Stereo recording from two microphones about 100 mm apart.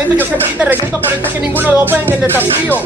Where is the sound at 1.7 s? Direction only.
20° right (ahead or behind).